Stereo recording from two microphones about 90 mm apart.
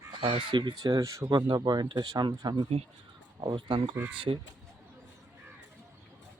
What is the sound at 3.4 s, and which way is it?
Speech, 60° right (ahead or behind).